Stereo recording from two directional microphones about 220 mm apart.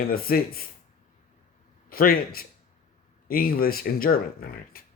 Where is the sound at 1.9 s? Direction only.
40° left (ahead or behind).